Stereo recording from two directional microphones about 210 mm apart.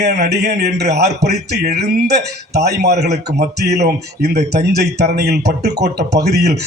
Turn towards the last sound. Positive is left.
turn(degrees=-50)  # may be behind; listen again after turning